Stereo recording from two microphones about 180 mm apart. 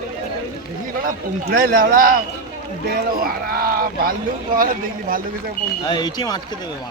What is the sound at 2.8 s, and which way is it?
Speech, 55° right (ahead or behind).